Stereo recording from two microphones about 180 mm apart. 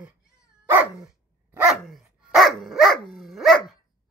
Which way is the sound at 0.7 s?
10° right (ahead or behind).